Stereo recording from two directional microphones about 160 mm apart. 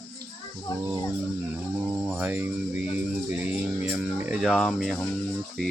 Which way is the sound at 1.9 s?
10° right (ahead or behind).